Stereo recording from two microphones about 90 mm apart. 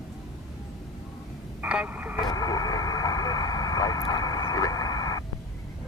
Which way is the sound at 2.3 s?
40° left (ahead or behind).